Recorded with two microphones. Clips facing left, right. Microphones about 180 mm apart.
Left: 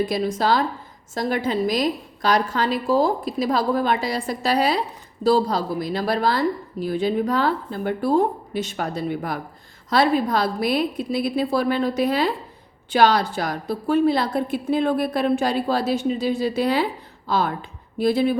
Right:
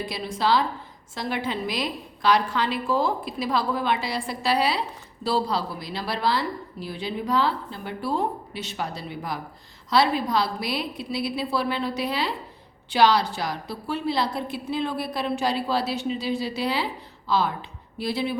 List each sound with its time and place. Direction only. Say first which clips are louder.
0.0 s a woman's voice: left 5 dB; 45° left (ahead or behind)